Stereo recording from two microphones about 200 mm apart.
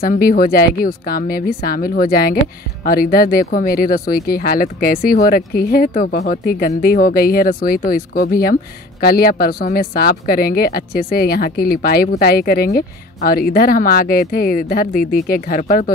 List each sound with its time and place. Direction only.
0.0 s speech: 45° left (ahead or behind)